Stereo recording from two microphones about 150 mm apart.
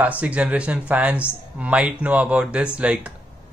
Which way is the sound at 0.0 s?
10° right (ahead or behind).